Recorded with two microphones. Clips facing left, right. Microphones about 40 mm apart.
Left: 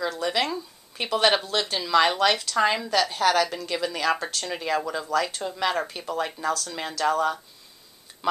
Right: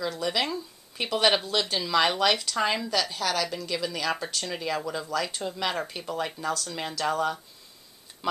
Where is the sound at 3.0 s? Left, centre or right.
Left.